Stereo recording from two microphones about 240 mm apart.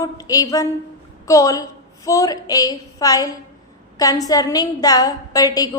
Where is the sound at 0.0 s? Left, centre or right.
Centre.